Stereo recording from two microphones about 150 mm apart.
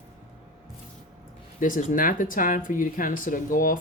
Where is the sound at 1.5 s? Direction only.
60° left (ahead or behind).